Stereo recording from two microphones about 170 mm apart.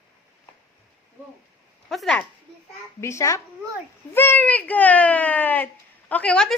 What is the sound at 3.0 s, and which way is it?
A woman's voice, 15° left (ahead or behind).